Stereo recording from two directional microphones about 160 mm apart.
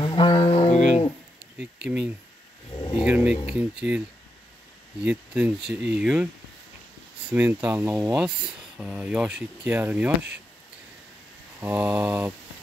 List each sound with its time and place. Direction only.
0.0 s mantra: 30° left (ahead or behind)
1.9 s speech: 10° right (ahead or behind)
2.7 s a sound: 30° left (ahead or behind)
3.0 s speech: 5° right (ahead or behind)
5.0 s speech: 10° right (ahead or behind)
7.2 s speech: 10° right (ahead or behind)
8.2 s speech: 5° right (ahead or behind)
11.6 s speech: 10° right (ahead or behind)